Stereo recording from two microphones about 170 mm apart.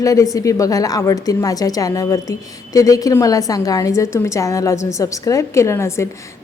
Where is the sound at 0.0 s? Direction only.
20° left (ahead or behind).